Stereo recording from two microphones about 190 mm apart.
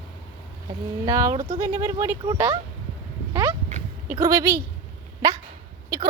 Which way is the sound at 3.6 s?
40° right (ahead or behind).